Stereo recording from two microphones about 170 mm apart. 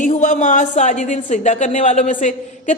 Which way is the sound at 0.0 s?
50° left (ahead or behind).